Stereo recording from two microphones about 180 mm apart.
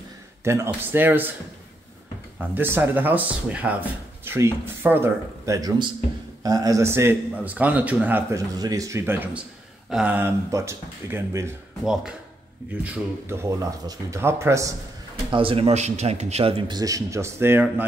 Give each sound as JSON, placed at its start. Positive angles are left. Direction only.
{"t": 0.4, "sound": "a man's voice", "side_deg": -15}
{"t": 2.5, "sound": "a man's voice", "side_deg": -10}
{"t": 8.5, "sound": "a man's voice", "side_deg": -20}
{"t": 11.8, "sound": "a man's voice", "side_deg": -5}
{"t": 15.3, "sound": "a man's voice", "side_deg": -30}